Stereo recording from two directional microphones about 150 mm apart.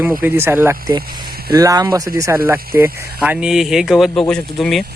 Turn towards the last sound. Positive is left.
turn(degrees=0)  # may be behind; listen again after turning